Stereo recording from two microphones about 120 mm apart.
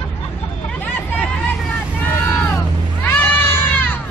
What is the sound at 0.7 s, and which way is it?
Hubbub, 15° left (ahead or behind).